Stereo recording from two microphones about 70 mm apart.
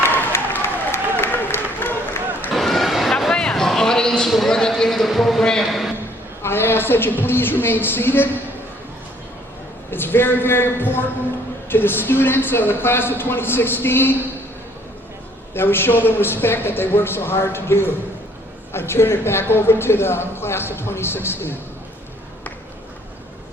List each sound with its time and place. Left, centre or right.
0.0 s applause: left
2.6 s a sound: centre
6.4 s a woman's voice: left
9.9 s a woman's voice: left
15.5 s a woman's voice: left